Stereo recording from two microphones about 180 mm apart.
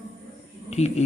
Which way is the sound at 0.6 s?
35° left (ahead or behind).